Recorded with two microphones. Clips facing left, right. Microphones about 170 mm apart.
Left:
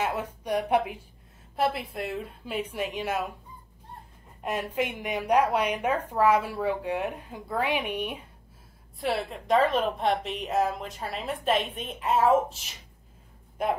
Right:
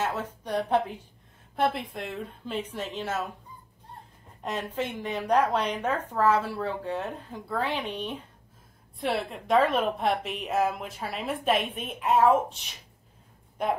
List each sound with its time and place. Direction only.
0.0 s a woman's voice: 10° left (ahead or behind)
4.4 s a woman's voice: 10° left (ahead or behind)
9.0 s a woman's voice: centre (ahead or behind)